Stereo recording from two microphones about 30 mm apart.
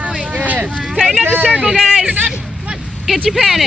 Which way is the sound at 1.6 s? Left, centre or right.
Centre.